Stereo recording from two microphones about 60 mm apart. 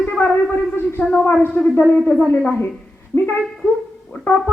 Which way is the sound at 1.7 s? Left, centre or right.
Left.